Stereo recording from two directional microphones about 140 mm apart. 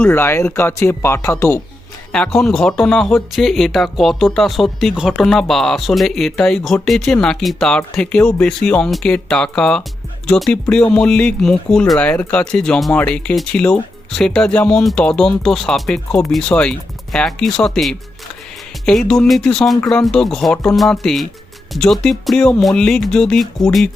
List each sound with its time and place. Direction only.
0.0 s speech: 15° left (ahead or behind)
2.1 s speech: 5° left (ahead or behind)